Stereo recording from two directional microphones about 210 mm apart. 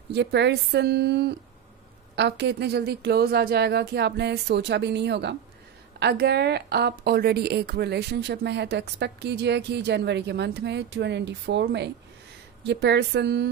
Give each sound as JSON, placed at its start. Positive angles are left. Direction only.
{"t": 0.1, "sound": "a woman's voice", "side_deg": -55}